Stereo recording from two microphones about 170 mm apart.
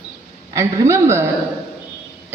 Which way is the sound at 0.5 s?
15° right (ahead or behind).